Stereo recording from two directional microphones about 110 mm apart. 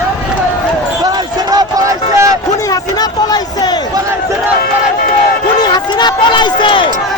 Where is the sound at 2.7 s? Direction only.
40° left (ahead or behind).